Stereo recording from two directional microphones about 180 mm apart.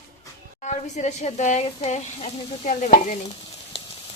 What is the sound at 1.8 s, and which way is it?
Stir, 40° left (ahead or behind).